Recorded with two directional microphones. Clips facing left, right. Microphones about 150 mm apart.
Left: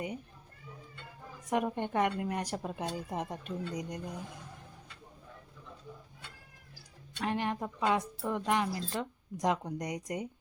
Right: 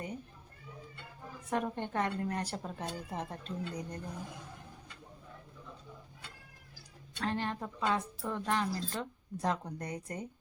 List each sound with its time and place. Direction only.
1.5 s speech: 15° left (ahead or behind)
7.2 s speech: 15° left (ahead or behind)